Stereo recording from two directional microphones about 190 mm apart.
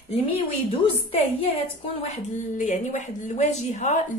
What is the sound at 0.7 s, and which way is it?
A woman's voice, 30° left (ahead or behind).